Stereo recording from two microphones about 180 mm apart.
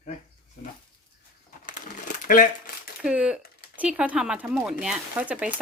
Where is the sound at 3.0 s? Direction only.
5° right (ahead or behind).